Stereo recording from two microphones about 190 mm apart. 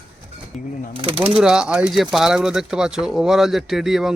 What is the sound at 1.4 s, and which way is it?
Speech, 5° right (ahead or behind).